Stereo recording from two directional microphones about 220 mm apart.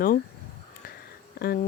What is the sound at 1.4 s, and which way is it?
Speech, 45° left (ahead or behind).